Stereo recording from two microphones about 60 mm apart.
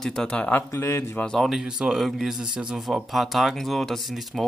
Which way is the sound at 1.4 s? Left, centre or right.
Centre.